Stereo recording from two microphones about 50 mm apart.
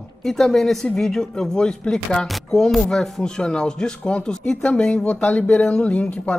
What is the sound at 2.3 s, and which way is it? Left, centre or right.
Music, centre.